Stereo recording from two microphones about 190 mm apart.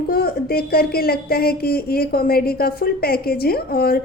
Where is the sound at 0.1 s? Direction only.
55° left (ahead or behind).